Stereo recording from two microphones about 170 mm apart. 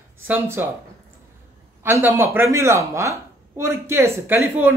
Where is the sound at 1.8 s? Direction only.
15° right (ahead or behind).